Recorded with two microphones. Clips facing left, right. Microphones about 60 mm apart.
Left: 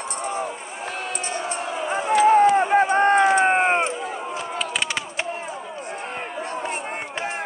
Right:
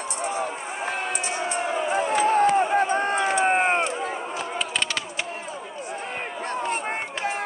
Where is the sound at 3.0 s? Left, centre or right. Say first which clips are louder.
Left 6 dB; left.